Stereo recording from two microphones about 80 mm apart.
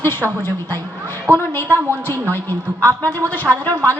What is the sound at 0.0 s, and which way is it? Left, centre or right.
A woman's voice, left.